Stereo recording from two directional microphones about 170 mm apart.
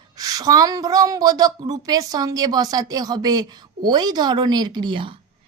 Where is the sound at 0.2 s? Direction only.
20° right (ahead or behind).